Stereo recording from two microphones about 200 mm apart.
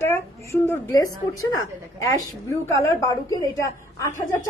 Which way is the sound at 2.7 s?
15° left (ahead or behind).